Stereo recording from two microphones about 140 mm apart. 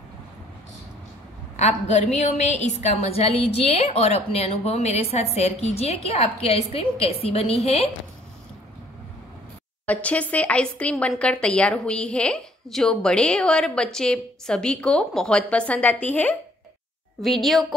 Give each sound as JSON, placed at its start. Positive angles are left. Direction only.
{"t": 1.6, "sound": "a woman's voice", "side_deg": 55}
{"t": 9.8, "sound": "a woman's voice", "side_deg": 10}